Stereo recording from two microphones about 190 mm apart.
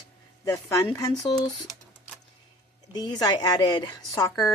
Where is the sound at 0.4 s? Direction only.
15° left (ahead or behind).